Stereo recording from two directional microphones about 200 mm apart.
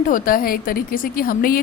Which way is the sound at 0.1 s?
45° left (ahead or behind).